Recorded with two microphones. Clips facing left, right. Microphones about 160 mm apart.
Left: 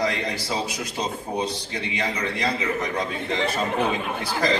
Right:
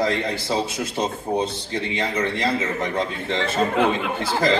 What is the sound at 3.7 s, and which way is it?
Speech, 90° right.